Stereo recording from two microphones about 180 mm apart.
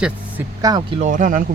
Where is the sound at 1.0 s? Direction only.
45° right (ahead or behind).